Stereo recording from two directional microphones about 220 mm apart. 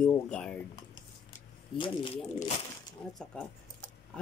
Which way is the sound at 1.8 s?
25° left (ahead or behind).